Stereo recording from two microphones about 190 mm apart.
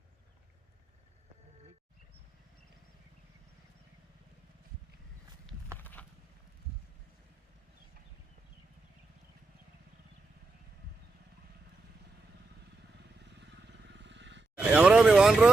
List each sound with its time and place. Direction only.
5.7 s a sound: 10° left (ahead or behind)
13.1 s vehicle: 65° right (ahead or behind)
14.6 s vehicle: 5° right (ahead or behind)